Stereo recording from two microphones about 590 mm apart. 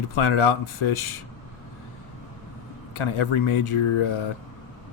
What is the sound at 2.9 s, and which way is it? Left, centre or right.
Speech, left.